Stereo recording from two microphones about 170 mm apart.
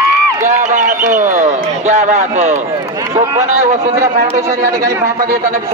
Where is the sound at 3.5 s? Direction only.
45° right (ahead or behind).